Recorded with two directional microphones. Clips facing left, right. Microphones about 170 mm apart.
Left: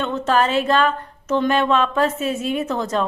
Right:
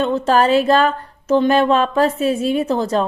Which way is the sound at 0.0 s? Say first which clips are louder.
Right 4 dB; 35° right (ahead or behind).